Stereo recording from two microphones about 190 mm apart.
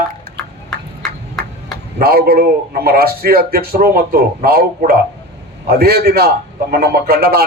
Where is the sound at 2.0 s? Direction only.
55° right (ahead or behind).